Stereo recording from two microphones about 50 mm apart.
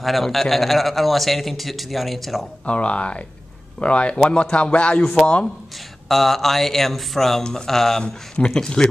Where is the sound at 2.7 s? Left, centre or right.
Left.